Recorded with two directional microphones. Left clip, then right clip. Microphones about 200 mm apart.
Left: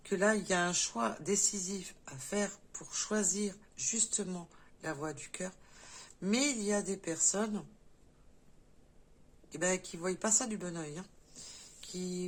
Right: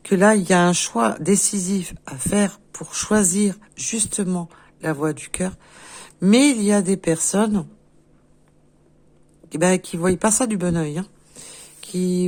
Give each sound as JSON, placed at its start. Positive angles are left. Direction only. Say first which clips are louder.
{"t": 0.0, "sound": "speech", "louder": "right 15 dB", "side_deg": -45}
{"t": 9.5, "sound": "speech", "louder": "right 15 dB", "side_deg": -45}